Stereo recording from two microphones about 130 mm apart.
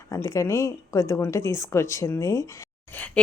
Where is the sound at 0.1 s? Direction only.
25° left (ahead or behind).